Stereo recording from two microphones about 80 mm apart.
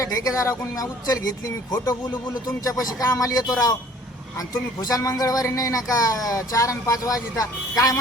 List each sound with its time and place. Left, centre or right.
0.0 s a man's voice: left